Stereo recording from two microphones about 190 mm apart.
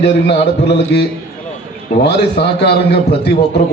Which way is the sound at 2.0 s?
60° left (ahead or behind).